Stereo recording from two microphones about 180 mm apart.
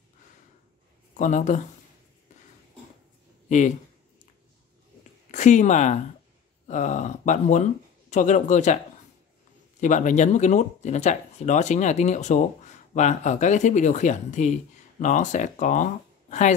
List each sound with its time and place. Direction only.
1.1 s speech: 40° left (ahead or behind)
3.4 s speech: 45° left (ahead or behind)
5.3 s speech: 40° left (ahead or behind)